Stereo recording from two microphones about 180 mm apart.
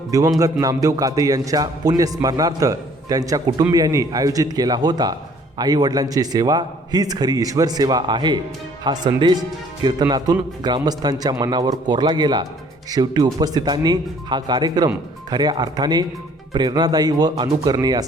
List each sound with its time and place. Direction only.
0.1 s a man's voice: 20° right (ahead or behind)